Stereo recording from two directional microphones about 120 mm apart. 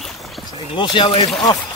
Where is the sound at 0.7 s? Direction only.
40° left (ahead or behind).